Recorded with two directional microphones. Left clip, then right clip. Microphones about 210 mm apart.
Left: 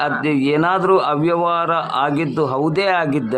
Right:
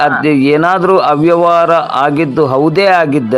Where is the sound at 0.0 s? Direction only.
25° right (ahead or behind).